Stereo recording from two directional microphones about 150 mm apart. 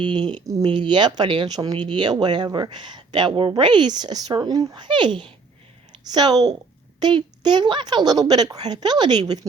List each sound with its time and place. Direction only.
0.0 s speech: 30° right (ahead or behind)